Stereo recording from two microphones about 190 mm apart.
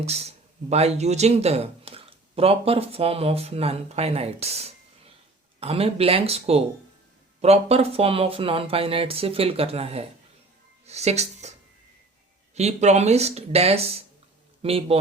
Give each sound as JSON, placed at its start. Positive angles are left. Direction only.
{"t": 0.0, "sound": "a woman's voice", "side_deg": -35}
{"t": 12.5, "sound": "speech", "side_deg": -35}